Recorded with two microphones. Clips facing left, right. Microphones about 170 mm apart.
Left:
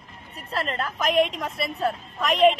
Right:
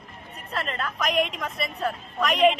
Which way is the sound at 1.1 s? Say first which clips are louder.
Left 5 dB; centre (ahead or behind).